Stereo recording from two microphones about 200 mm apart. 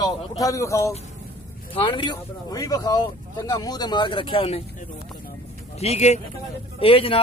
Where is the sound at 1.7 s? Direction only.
25° left (ahead or behind).